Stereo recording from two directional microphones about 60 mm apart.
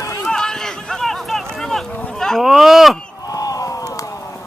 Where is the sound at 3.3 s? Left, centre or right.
Left.